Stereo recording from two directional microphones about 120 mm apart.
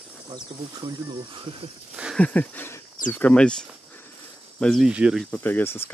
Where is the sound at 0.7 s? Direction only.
35° right (ahead or behind).